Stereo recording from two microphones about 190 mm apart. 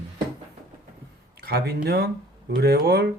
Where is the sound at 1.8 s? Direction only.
60° right (ahead or behind).